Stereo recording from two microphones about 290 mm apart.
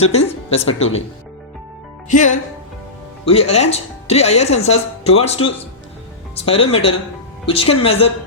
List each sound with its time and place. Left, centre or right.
0.0 s speech: left
2.0 s speech: left